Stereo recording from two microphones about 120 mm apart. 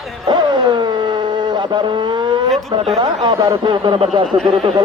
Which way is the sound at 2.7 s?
55° right (ahead or behind).